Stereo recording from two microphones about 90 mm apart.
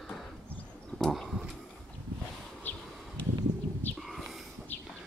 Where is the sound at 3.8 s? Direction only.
20° left (ahead or behind).